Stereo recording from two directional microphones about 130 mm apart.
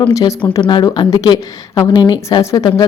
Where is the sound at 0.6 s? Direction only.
35° left (ahead or behind).